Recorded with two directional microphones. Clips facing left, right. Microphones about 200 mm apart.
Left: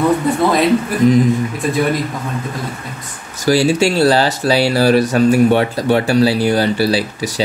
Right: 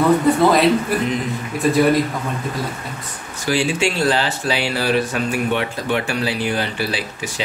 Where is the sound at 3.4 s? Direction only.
40° left (ahead or behind).